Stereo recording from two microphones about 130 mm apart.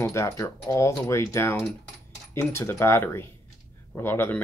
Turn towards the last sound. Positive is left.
turn(degrees=15)  # may be behind; listen again after turning